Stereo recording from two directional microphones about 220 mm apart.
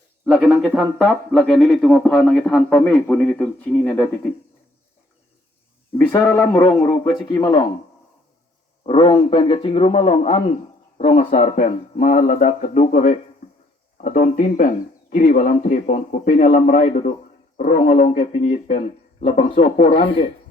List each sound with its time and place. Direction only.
0.3 s speech: 5° right (ahead or behind)
6.1 s speech: 10° left (ahead or behind)
8.9 s a man's voice: 25° left (ahead or behind)